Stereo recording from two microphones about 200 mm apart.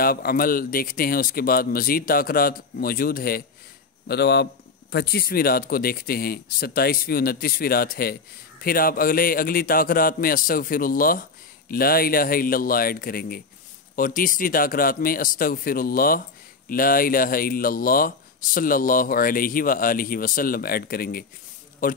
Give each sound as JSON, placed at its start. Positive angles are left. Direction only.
{"t": 0.0, "sound": "a man's voice", "side_deg": 50}